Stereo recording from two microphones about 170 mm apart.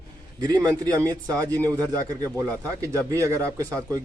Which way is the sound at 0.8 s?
20° right (ahead or behind).